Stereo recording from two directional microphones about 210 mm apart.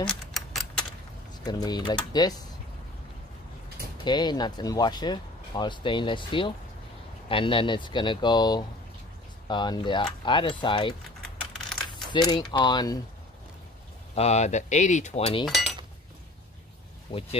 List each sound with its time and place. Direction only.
0.0 s a sound: centre (ahead or behind)
1.4 s speech: 20° left (ahead or behind)
4.0 s speech: 20° left (ahead or behind)
12.1 s speech: 20° left (ahead or behind)
14.1 s speech: 30° left (ahead or behind)
17.1 s speech: 25° left (ahead or behind)